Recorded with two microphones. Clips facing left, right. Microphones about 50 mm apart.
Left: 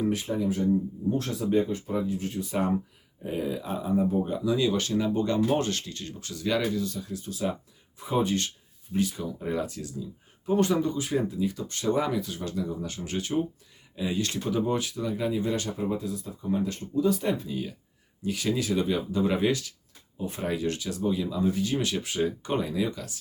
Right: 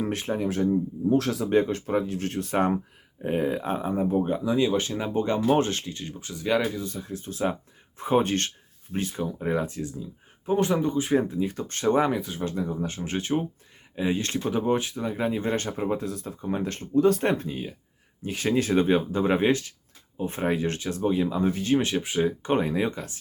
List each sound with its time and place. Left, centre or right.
0.0 s speech: right
0.4 s speech: right
1.1 s speech: right
8.9 s speech: right
18.2 s speech: right
22.4 s speech: right